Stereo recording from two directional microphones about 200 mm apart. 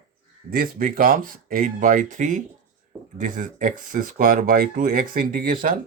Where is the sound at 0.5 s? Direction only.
45° right (ahead or behind).